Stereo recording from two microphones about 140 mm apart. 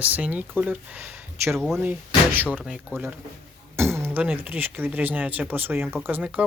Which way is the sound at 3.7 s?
15° right (ahead or behind).